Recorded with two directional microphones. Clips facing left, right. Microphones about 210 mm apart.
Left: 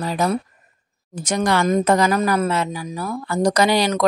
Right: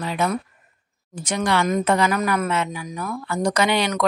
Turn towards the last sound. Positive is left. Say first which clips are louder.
# left 3 dB
turn(degrees=35)  # may be behind; listen again after turning